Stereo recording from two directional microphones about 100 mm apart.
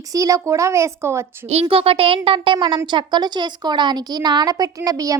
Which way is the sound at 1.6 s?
70° right (ahead or behind).